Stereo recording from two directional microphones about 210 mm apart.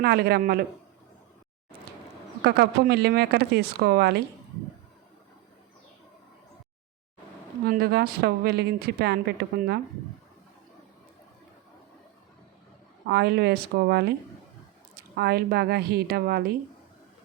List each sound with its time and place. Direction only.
0.0 s a woman's voice: 45° right (ahead or behind)
2.4 s a woman's voice: 50° right (ahead or behind)
7.6 s a woman's voice: 45° right (ahead or behind)
13.1 s a woman's voice: 50° right (ahead or behind)
15.1 s a woman's voice: 50° right (ahead or behind)